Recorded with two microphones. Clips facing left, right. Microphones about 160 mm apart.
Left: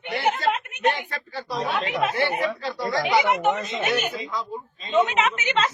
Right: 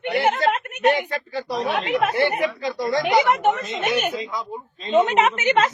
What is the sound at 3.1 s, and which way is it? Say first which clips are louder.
Speech: right 2 dB; 45° right (ahead or behind).